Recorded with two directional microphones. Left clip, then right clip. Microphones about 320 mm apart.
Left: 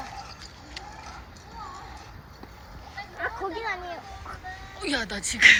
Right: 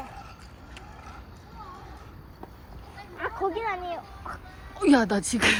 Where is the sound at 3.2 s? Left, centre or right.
Right.